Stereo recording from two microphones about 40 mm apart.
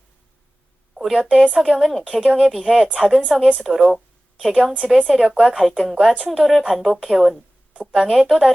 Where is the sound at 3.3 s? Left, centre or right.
Centre.